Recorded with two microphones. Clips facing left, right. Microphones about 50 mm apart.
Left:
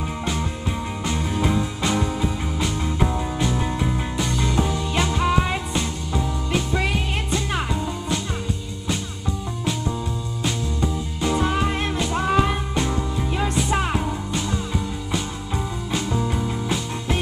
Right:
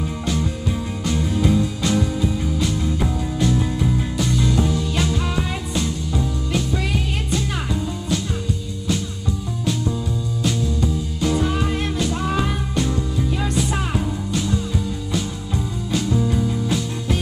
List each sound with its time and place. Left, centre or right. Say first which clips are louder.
1.0 s music: right 3 dB; centre
10.8 s music: right 2 dB; centre
15.9 s music: right 4 dB; centre